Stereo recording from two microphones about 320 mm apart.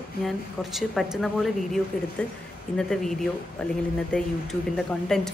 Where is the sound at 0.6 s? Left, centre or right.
Centre.